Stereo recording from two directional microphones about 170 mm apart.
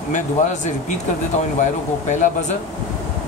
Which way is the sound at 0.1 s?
45° left (ahead or behind).